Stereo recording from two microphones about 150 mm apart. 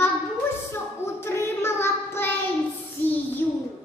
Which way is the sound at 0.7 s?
15° left (ahead or behind).